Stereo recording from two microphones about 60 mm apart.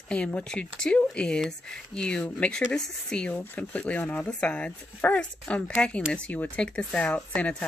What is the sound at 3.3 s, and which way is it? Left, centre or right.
Speech, left.